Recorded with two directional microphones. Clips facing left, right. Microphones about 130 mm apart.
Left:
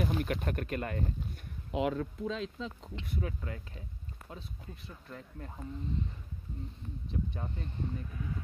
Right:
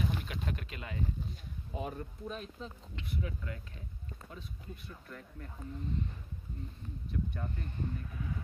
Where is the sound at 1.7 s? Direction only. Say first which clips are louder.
Left 8 dB; 90° left.